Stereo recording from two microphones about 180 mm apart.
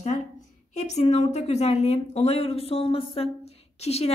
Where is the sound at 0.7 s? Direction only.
40° left (ahead or behind).